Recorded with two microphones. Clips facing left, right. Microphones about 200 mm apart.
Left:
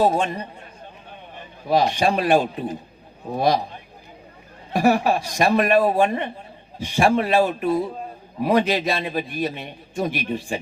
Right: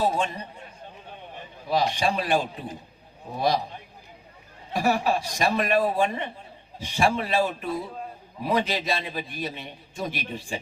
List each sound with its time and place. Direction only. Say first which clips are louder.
0.0 s a man's voice: left 6 dB; 55° left (ahead or behind)
1.6 s a man's voice: left 5 dB; 55° left (ahead or behind)
4.7 s a man's voice: left 5 dB; 60° left (ahead or behind)